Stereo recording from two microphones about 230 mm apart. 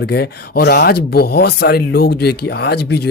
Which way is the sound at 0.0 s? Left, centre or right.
Left.